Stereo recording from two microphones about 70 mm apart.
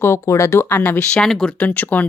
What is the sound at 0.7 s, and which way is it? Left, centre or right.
Speech, left.